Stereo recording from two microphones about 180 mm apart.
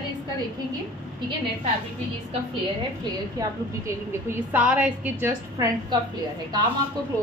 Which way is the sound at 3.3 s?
15° right (ahead or behind).